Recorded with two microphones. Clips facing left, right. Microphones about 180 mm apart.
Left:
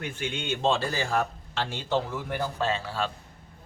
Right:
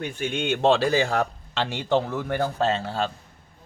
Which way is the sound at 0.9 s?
85° right.